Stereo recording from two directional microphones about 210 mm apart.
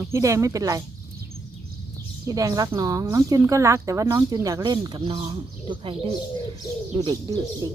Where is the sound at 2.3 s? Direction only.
15° right (ahead or behind).